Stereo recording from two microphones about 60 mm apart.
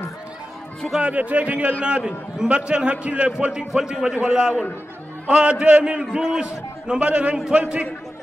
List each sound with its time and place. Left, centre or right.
0.9 s a man's voice: right